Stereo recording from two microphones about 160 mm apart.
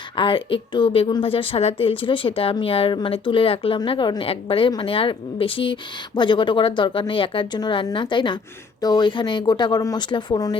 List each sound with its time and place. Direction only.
0.2 s a woman's voice: 35° left (ahead or behind)